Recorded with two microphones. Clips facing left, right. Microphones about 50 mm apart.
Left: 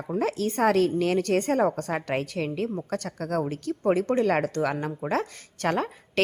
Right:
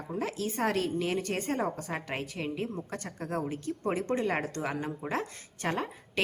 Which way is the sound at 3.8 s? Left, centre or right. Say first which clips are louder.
Left 8 dB; left.